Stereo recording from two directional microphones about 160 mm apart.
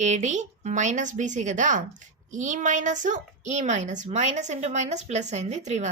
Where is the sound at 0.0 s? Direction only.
45° right (ahead or behind).